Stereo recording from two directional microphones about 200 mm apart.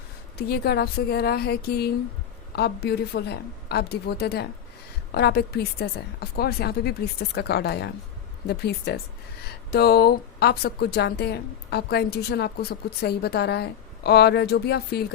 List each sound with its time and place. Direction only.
0.3 s speech: 50° left (ahead or behind)